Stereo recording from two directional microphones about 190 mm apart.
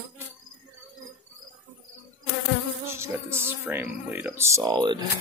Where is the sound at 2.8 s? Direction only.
15° right (ahead or behind).